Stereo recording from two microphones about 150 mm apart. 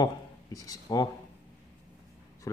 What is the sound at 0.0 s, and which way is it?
Speech, 25° left (ahead or behind).